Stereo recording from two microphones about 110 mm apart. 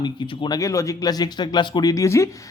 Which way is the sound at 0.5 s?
30° left (ahead or behind).